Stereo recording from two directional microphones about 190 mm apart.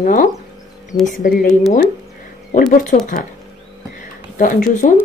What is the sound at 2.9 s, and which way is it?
Speech, 35° left (ahead or behind).